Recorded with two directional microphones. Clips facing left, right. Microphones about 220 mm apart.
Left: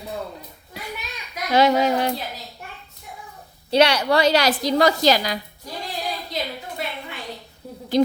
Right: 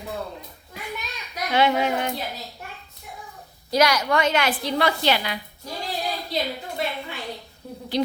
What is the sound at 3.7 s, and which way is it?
A woman's voice, 30° left (ahead or behind).